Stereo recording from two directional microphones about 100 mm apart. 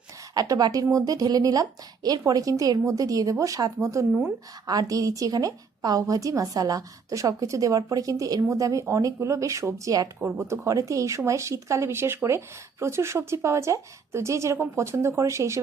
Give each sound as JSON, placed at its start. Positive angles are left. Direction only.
{"t": 0.3, "sound": "a woman's voice", "side_deg": -40}
{"t": 10.2, "sound": "a woman's voice", "side_deg": -25}